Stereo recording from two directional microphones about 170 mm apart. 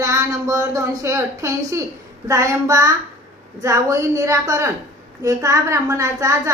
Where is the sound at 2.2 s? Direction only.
20° right (ahead or behind).